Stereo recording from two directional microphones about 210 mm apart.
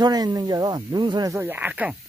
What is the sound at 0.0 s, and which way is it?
Speech, 20° right (ahead or behind).